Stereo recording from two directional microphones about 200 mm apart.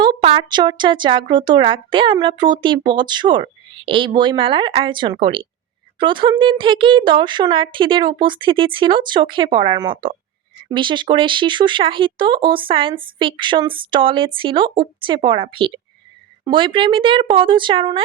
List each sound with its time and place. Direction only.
0.0 s speech: 25° right (ahead or behind)